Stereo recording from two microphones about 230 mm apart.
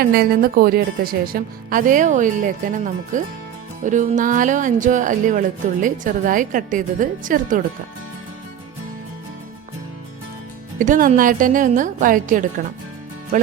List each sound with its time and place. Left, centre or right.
0.0 s speech: right
10.8 s speech: right